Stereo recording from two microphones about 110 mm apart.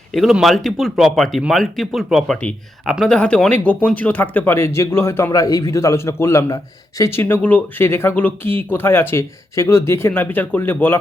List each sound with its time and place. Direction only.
0.1 s a man's voice: centre (ahead or behind); by 10.9 s 20° left (ahead or behind)